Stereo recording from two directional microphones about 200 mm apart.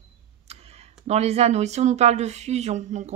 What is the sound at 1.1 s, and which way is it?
Speech, 30° right (ahead or behind).